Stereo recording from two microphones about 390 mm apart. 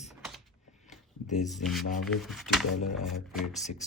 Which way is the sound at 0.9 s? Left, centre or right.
Centre.